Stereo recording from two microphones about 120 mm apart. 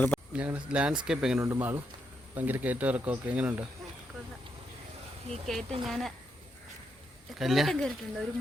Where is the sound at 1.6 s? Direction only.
15° right (ahead or behind).